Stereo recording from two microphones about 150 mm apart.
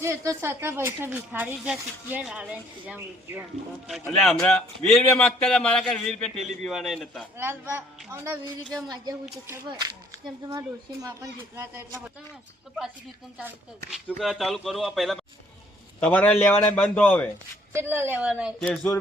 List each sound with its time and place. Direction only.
0.0 s speech: 20° right (ahead or behind)
4.1 s a man's voice: 5° left (ahead or behind)
7.3 s speech: 15° right (ahead or behind)
11.0 s speech: 20° right (ahead or behind)
13.9 s a man's voice: centre (ahead or behind)
17.7 s speech: 15° right (ahead or behind)
18.6 s a man's voice: 5° left (ahead or behind)